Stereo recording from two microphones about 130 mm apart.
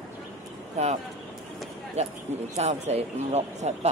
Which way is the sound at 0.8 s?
55° right (ahead or behind).